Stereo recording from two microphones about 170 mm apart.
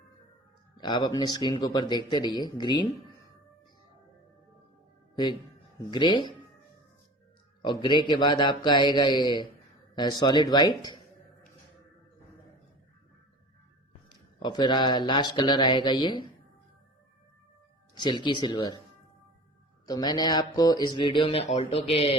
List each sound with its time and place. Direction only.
0.8 s speech: 25° left (ahead or behind)
5.1 s speech: 25° left (ahead or behind)
7.6 s speech: 25° left (ahead or behind)
14.3 s speech: 25° left (ahead or behind)
17.9 s speech: 25° left (ahead or behind)
19.9 s speech: 25° left (ahead or behind)